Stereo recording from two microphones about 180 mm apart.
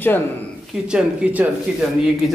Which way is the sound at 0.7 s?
5° right (ahead or behind).